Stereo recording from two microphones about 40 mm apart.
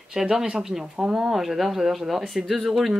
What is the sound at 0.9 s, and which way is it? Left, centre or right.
Speech, right.